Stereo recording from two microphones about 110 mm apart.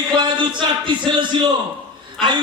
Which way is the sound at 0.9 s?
45° right (ahead or behind).